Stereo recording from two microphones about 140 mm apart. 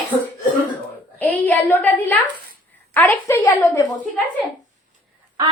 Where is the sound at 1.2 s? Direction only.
10° left (ahead or behind).